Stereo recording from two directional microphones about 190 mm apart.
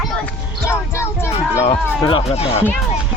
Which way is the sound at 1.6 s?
30° left (ahead or behind).